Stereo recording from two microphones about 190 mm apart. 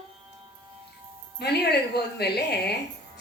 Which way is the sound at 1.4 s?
60° left (ahead or behind).